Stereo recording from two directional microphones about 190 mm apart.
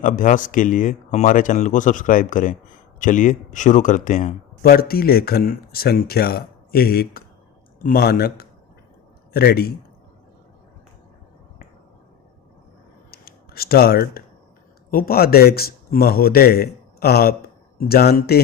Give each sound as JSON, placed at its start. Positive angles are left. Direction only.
{"t": 0.0, "sound": "speech", "side_deg": 45}
{"t": 13.1, "sound": "scissors", "side_deg": 55}
{"t": 14.8, "sound": "speech", "side_deg": 50}